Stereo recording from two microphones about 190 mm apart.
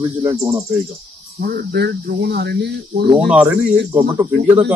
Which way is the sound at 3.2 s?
5° right (ahead or behind).